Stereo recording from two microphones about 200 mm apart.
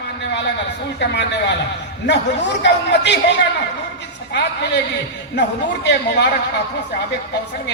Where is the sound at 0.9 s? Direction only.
60° left (ahead or behind).